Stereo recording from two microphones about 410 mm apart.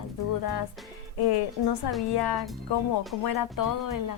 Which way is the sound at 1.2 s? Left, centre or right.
Left.